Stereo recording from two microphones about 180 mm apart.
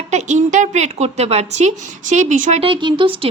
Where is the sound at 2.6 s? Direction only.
25° right (ahead or behind).